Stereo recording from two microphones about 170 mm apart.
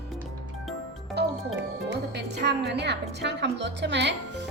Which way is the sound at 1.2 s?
75° right (ahead or behind).